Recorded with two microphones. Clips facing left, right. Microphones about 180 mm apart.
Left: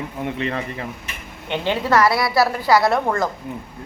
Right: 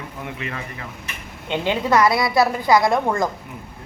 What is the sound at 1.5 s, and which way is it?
A woman's voice, 15° right (ahead or behind).